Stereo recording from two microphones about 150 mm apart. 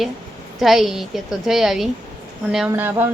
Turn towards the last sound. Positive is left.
turn(degrees=-15)  # may be behind; listen again after turning